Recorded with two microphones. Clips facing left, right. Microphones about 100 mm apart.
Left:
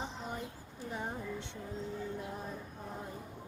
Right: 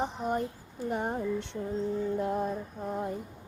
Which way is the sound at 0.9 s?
60° right (ahead or behind).